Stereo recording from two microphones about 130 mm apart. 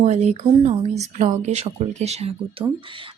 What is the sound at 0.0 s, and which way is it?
Speech, 60° right (ahead or behind).